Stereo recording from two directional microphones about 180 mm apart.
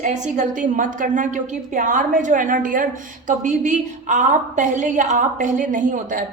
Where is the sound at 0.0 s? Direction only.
45° right (ahead or behind).